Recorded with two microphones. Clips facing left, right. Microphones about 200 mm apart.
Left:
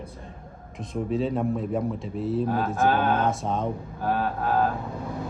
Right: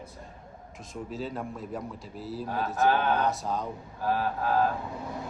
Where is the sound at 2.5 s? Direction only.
50° left (ahead or behind).